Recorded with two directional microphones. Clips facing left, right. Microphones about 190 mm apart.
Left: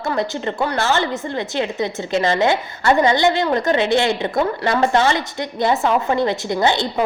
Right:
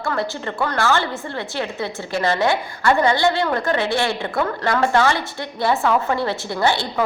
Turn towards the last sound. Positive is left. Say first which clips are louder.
# left 2 dB
turn(degrees=20)  # may be behind; listen again after turning